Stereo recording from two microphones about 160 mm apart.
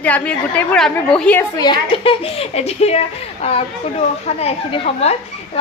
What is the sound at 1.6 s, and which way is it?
A woman's voice, 30° left (ahead or behind).